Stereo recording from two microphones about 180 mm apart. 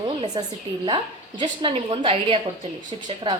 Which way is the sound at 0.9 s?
25° right (ahead or behind).